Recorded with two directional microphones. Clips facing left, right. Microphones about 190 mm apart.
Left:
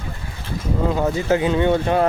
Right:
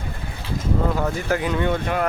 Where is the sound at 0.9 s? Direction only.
20° left (ahead or behind).